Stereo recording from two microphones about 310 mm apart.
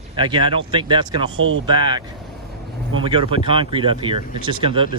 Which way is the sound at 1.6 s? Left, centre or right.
Centre.